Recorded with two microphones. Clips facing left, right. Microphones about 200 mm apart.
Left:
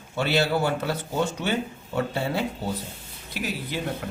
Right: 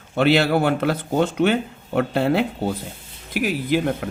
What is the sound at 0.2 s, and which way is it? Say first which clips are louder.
Speech: right 6 dB; 60° right (ahead or behind).